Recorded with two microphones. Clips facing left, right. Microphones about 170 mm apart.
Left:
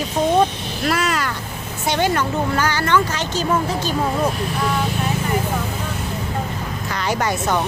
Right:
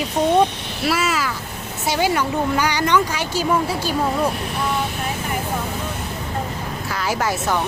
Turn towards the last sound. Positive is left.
turn(degrees=-5)  # may be behind; listen again after turning